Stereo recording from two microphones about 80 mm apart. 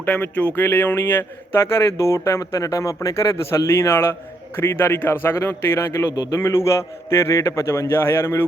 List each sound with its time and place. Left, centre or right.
0.0 s a man's voice: left
2.0 s a man's voice: left